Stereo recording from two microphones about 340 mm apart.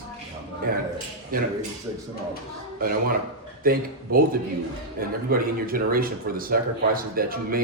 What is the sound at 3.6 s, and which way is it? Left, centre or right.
Speech, right.